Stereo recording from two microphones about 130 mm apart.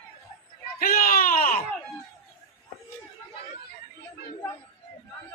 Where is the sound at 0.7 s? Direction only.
90° left.